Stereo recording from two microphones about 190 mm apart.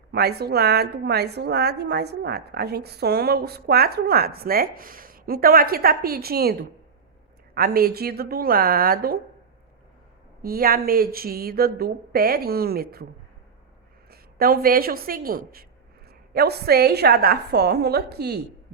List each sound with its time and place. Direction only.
0.1 s a woman's voice: 55° right (ahead or behind)
10.4 s speech: 50° right (ahead or behind)
14.1 s a woman's voice: 50° right (ahead or behind)